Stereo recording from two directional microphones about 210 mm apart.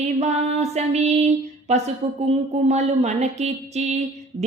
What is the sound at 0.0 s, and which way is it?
Mantra, 30° right (ahead or behind).